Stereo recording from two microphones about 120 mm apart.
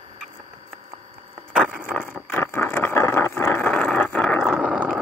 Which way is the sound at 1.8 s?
15° left (ahead or behind).